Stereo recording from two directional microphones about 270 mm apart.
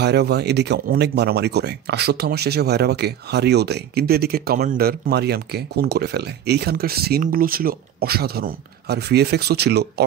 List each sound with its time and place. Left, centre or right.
0.0 s speech: right